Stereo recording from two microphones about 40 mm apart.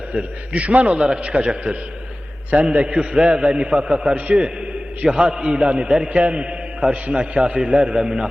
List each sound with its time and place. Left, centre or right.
0.1 s a man's voice: right
8.0 s a man's voice: centre